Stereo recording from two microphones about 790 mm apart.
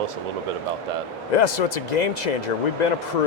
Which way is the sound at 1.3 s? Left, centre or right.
Left.